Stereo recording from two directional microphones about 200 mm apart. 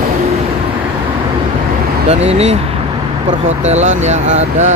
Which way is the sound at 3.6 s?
35° right (ahead or behind).